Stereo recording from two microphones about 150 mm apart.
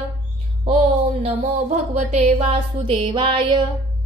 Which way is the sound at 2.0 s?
45° right (ahead or behind).